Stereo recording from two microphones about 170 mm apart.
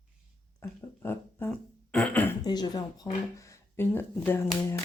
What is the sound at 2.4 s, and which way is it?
Speech, 25° left (ahead or behind).